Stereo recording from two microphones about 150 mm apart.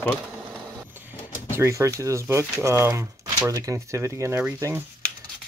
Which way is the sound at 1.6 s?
20° right (ahead or behind).